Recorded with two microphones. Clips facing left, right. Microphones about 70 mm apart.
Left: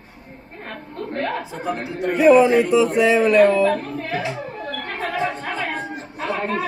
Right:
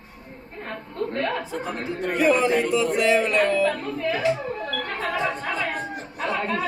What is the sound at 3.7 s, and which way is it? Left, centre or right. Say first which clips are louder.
Speech: left 1 dB; left.